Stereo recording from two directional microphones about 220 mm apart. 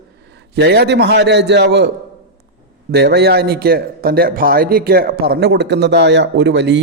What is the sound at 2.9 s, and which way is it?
A man's voice, 50° right (ahead or behind).